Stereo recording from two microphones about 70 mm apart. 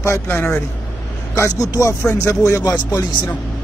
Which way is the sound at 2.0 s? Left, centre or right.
Left.